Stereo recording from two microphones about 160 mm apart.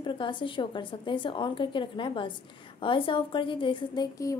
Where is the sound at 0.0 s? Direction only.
30° left (ahead or behind).